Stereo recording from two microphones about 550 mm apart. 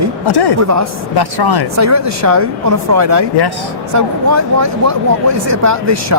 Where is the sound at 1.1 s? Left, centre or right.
Left.